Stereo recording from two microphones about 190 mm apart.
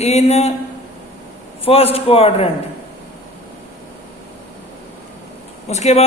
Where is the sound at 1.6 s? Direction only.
30° left (ahead or behind).